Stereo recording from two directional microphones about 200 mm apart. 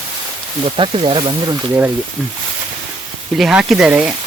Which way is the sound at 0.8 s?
25° right (ahead or behind).